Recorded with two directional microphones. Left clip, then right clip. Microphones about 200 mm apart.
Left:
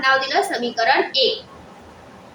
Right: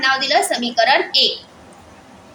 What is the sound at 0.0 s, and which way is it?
A woman's voice, 35° right (ahead or behind).